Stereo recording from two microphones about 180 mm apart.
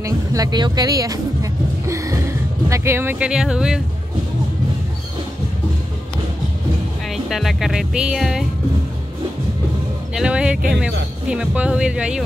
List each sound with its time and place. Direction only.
0.0 s music: 20° right (ahead or behind); by 3.8 s 5° right (ahead or behind)
7.1 s speech: centre (ahead or behind)
10.1 s speech: 5° right (ahead or behind)